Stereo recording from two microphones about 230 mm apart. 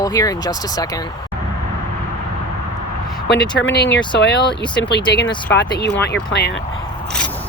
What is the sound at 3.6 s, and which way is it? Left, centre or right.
Speech, left.